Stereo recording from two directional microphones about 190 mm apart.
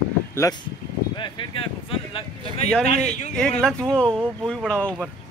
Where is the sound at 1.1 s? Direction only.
25° left (ahead or behind).